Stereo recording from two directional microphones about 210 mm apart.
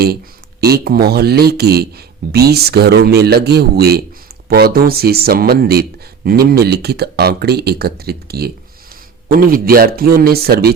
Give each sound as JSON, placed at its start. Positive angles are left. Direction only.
{"t": 0.6, "sound": "speech", "side_deg": -50}